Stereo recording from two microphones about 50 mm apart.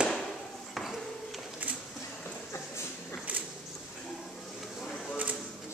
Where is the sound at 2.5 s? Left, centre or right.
Left.